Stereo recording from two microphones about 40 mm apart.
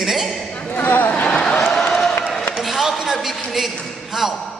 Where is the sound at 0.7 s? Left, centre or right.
Left.